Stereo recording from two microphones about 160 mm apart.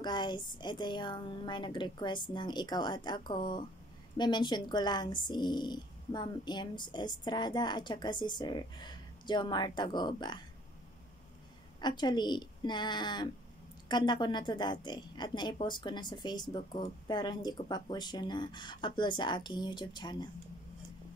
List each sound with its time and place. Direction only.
0.0 s speech: 30° left (ahead or behind)
11.8 s speech: 25° left (ahead or behind)